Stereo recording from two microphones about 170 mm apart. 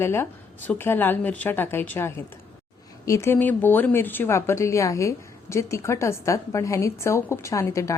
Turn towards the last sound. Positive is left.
turn(degrees=15)  # may be behind; listen again after turning